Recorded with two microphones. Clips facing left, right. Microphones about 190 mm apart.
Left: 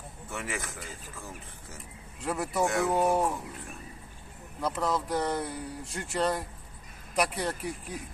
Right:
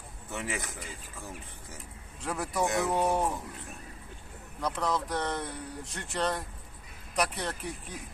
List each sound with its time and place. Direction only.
0.3 s a man's voice: 20° right (ahead or behind)
2.2 s speech: 5° left (ahead or behind)
2.6 s speech: 20° right (ahead or behind)
2.9 s speech: 5° left (ahead or behind)
4.6 s speech: 5° left (ahead or behind)